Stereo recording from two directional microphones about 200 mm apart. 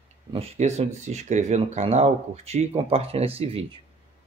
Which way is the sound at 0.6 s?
35° right (ahead or behind).